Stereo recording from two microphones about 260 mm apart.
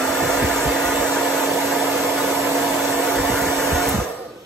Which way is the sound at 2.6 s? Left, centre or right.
Centre.